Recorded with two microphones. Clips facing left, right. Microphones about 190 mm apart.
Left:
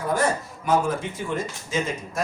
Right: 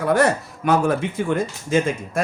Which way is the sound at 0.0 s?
70° right (ahead or behind).